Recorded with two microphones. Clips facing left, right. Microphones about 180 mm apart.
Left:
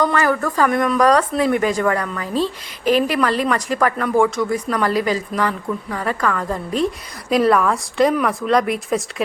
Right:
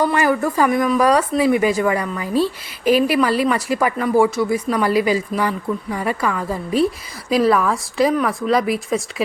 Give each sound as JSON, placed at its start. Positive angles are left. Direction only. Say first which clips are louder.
{"t": 0.0, "sound": "speech", "louder": "right 1 dB", "side_deg": -15}